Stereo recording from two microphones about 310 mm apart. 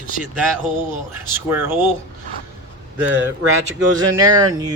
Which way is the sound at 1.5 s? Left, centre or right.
Centre.